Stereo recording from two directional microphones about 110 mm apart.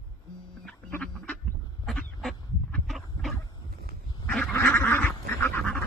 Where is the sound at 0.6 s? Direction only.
10° left (ahead or behind).